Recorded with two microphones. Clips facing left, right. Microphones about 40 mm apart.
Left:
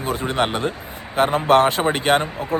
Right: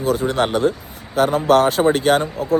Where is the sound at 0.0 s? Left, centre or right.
Left.